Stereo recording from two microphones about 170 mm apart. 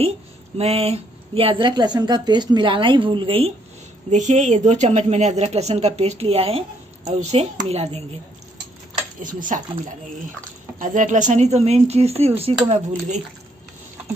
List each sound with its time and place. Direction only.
0.6 s a woman's voice: 35° right (ahead or behind)
4.1 s a woman's voice: 45° right (ahead or behind)
9.2 s a woman's voice: 50° right (ahead or behind)